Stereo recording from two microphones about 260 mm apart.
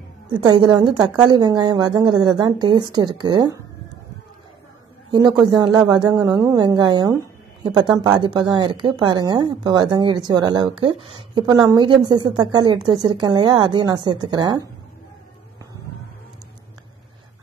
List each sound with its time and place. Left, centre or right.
0.3 s a woman's voice: centre
5.1 s a woman's voice: centre